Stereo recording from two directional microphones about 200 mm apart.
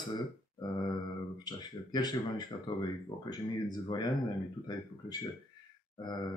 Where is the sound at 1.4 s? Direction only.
20° left (ahead or behind).